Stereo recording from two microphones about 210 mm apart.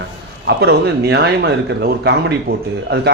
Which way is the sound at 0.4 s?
50° right (ahead or behind).